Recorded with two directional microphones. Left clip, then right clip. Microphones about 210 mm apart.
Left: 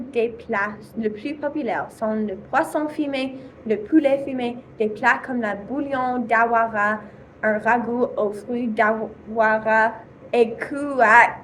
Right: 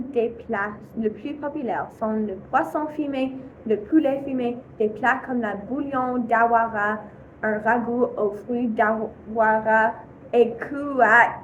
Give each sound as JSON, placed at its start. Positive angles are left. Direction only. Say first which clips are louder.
{"t": 0.1, "sound": "a woman's voice", "louder": "left 2 dB", "side_deg": 20}